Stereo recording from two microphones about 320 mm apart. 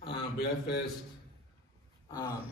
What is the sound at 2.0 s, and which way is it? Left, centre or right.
Gasp, centre.